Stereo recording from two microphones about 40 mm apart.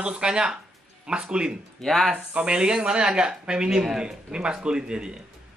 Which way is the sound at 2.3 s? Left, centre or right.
Right.